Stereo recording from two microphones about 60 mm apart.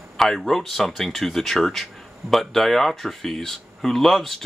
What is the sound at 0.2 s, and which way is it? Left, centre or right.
Speech, centre.